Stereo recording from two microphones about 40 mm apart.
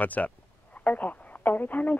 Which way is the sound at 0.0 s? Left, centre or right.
Left.